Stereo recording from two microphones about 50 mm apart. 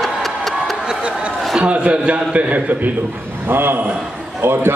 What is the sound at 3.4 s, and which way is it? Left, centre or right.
A man's voice, right.